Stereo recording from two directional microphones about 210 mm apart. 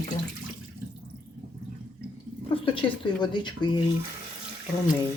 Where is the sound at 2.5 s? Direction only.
25° left (ahead or behind).